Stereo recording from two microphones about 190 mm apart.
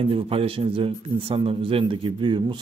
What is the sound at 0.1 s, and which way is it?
Speech, 30° right (ahead or behind).